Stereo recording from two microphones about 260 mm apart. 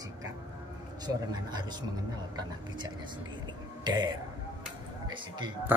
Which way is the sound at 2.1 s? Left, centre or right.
Centre.